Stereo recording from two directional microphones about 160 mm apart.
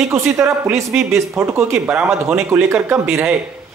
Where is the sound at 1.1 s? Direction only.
15° right (ahead or behind).